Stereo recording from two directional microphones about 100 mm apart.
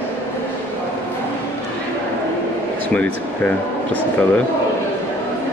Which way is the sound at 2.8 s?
15° left (ahead or behind).